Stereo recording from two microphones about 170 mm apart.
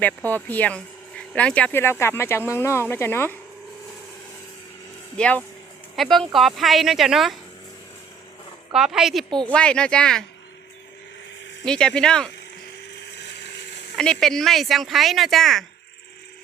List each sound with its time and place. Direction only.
0.0 s speech: 10° left (ahead or behind)
5.1 s speech: 5° left (ahead or behind)
8.7 s speech: centre (ahead or behind)
11.6 s speech: 5° left (ahead or behind)
12.9 s a sound: 80° left
13.9 s speech: 5° left (ahead or behind)